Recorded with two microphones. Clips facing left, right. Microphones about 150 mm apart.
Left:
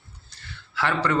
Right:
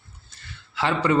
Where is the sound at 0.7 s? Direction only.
20° right (ahead or behind).